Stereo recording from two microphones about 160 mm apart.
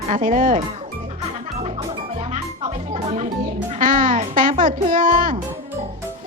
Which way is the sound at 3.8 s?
55° right (ahead or behind).